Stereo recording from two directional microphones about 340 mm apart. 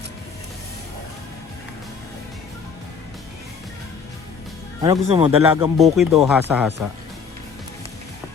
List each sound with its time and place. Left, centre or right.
4.8 s speech: centre
5.7 s speech: centre